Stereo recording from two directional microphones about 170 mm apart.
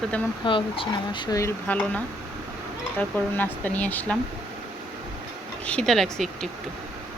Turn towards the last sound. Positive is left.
turn(degrees=0)  # may be behind; listen again after turning